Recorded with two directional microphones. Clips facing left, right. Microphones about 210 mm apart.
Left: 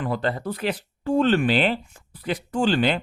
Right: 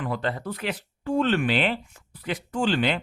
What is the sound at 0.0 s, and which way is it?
Speech, 35° left (ahead or behind).